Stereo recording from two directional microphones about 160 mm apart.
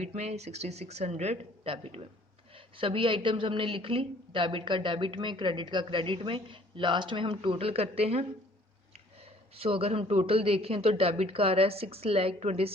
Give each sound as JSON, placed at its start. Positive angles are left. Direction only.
{"t": 0.0, "sound": "a woman's voice", "side_deg": -45}
{"t": 9.6, "sound": "a woman's voice", "side_deg": -35}